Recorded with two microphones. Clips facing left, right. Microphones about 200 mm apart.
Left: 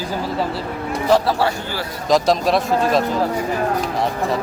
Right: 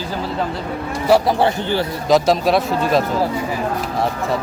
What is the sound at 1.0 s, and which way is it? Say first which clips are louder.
Speech: right 2 dB; 15° right (ahead or behind).